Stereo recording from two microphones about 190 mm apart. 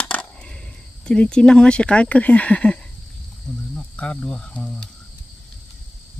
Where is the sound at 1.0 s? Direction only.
5° left (ahead or behind).